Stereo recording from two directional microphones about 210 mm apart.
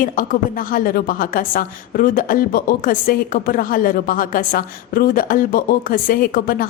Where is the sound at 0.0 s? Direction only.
40° left (ahead or behind).